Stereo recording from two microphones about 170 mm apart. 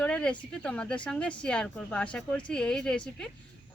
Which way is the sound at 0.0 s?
5° left (ahead or behind).